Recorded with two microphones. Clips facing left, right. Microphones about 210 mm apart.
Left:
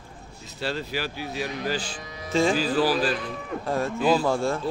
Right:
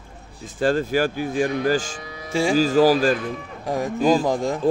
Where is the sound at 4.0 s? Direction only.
45° right (ahead or behind).